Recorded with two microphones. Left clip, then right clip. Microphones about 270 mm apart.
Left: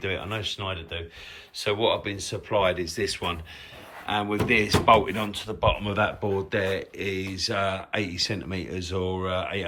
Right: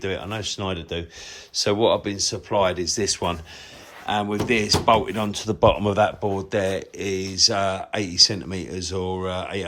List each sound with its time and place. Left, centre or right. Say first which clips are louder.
0.0 s speech: right 2 dB; centre
5.3 s speech: right 9 dB; right